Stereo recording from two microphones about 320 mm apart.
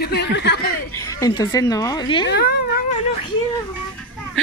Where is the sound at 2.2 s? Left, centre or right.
Left.